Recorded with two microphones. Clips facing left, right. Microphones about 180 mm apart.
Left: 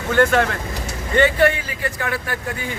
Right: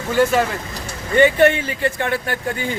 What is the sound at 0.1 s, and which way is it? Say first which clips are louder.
Speech: even; 5° right (ahead or behind).